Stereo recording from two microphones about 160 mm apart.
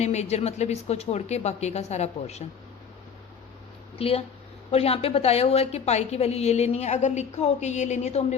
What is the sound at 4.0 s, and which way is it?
A woman's voice, 35° left (ahead or behind).